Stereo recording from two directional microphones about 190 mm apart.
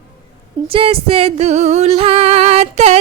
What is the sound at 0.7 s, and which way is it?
Music, 30° right (ahead or behind).